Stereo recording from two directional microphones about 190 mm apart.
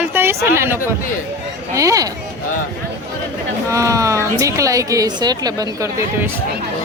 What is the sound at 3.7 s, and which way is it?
A woman's voice, 15° right (ahead or behind).